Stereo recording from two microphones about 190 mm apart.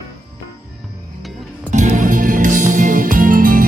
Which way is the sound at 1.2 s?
Centre (ahead or behind).